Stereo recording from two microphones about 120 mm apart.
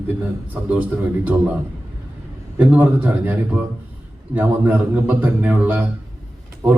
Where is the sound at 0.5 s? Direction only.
15° right (ahead or behind).